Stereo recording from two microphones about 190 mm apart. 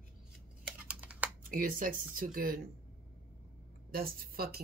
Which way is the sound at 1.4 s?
45° right (ahead or behind).